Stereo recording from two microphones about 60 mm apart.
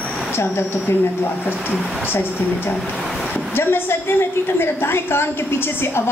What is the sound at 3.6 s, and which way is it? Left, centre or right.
A woman's voice, left.